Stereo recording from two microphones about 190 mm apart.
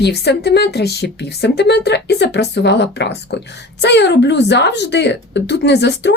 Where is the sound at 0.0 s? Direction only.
60° left (ahead or behind).